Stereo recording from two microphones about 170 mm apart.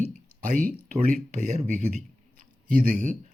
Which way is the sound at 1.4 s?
45° right (ahead or behind).